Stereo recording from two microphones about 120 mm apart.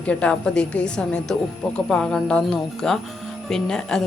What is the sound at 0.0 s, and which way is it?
A woman's voice, 10° left (ahead or behind).